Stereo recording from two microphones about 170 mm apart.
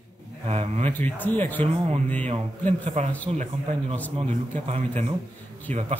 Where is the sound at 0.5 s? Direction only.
40° right (ahead or behind).